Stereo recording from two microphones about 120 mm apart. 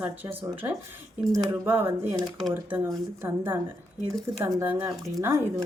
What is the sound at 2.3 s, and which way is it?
Speech, centre (ahead or behind).